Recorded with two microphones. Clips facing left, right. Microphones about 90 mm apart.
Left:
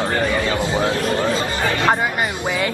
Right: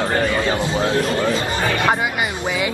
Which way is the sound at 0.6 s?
20° left (ahead or behind).